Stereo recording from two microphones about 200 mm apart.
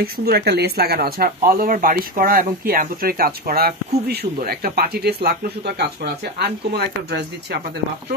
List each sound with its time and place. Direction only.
0.0 s speech: 50° right (ahead or behind)
6.3 s speech: 55° right (ahead or behind)